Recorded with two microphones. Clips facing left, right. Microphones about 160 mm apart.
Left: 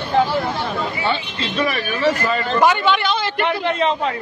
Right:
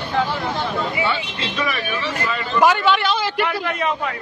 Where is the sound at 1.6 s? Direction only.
40° left (ahead or behind).